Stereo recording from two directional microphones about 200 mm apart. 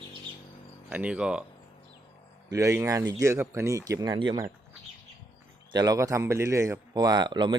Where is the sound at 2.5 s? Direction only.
15° right (ahead or behind).